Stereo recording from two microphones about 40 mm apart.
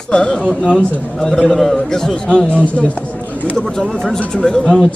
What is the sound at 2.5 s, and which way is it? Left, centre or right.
Speech, left.